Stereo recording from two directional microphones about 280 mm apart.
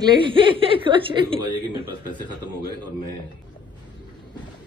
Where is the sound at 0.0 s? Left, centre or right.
Centre.